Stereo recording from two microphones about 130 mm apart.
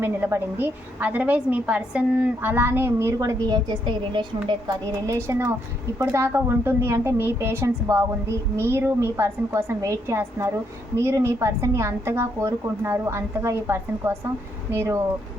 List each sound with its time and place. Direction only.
0.0 s a woman's voice: 15° right (ahead or behind); by 4.8 s 35° right (ahead or behind)
5.0 s a woman's voice: 20° right (ahead or behind)